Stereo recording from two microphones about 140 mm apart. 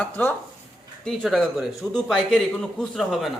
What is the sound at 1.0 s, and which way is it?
Speech, centre (ahead or behind).